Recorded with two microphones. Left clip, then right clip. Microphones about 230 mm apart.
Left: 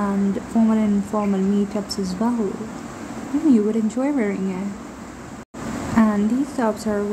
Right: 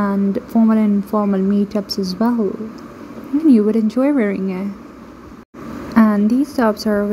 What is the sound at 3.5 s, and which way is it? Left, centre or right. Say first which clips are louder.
A woman's voice: right 5 dB; right.